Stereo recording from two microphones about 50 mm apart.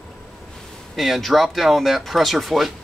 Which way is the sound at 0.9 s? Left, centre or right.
Centre.